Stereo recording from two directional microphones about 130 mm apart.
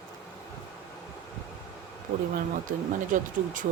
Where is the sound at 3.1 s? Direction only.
90° right.